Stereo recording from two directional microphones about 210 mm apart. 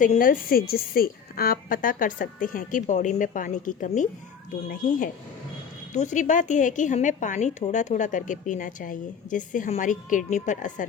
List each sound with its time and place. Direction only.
0.0 s a woman's voice: 40° left (ahead or behind)
5.9 s a woman's voice: 35° left (ahead or behind)